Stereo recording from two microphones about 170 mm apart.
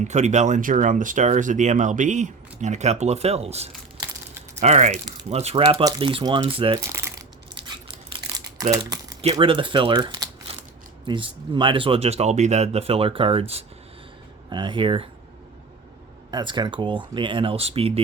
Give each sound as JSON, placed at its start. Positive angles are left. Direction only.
{"t": 0.0, "sound": "speech", "side_deg": -45}
{"t": 4.0, "sound": "crumpling", "side_deg": -25}
{"t": 4.6, "sound": "speech", "side_deg": -40}
{"t": 6.7, "sound": "shuffling cards", "side_deg": -15}
{"t": 9.3, "sound": "speech", "side_deg": -30}
{"t": 16.3, "sound": "speech", "side_deg": -25}